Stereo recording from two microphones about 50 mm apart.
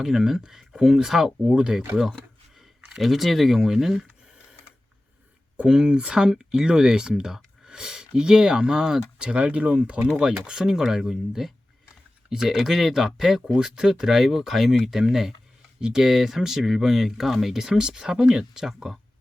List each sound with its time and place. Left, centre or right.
0.0 s speech: centre
3.0 s speech: centre
5.6 s speech: centre
10.4 s speech: centre